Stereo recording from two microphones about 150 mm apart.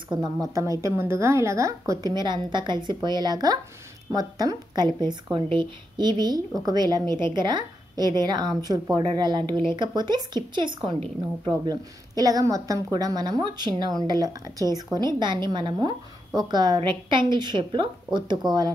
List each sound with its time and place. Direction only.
0.1 s a woman's voice: 25° right (ahead or behind)